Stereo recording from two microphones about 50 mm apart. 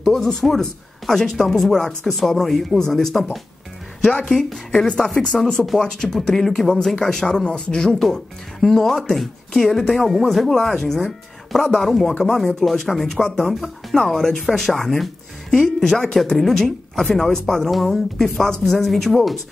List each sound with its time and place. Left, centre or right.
0.0 s speech: centre
4.3 s speech: centre
11.5 s speech: centre